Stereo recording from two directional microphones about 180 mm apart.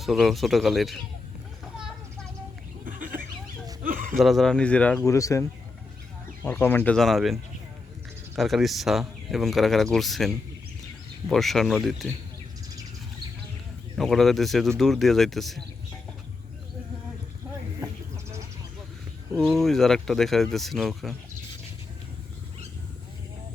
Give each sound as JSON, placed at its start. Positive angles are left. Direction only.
{"t": 0.0, "sound": "speech", "side_deg": 0}
{"t": 2.8, "sound": "a sound", "side_deg": -50}
{"t": 4.2, "sound": "speech", "side_deg": 0}
{"t": 8.4, "sound": "speech", "side_deg": 0}
{"t": 13.9, "sound": "speech", "side_deg": 0}
{"t": 19.5, "sound": "speech", "side_deg": 0}